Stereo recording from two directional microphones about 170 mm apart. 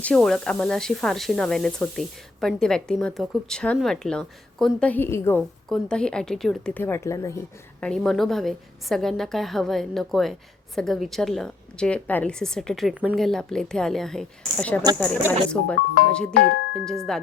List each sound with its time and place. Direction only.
0.0 s speech: 5° left (ahead or behind)
5.4 s speech: centre (ahead or behind); by 7.3 s 15° left (ahead or behind)
7.8 s speech: 5° left (ahead or behind)
16.3 s speech: 70° left (ahead or behind)
17.1 s speech: 5° left (ahead or behind)